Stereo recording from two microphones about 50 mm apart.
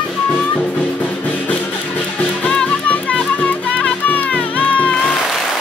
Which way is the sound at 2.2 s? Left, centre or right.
Left.